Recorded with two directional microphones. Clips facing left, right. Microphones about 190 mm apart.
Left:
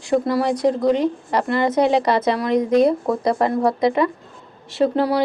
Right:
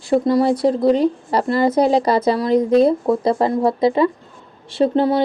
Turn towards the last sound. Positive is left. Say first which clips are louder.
# right 2 dB
turn(degrees=-25)  # may be behind; listen again after turning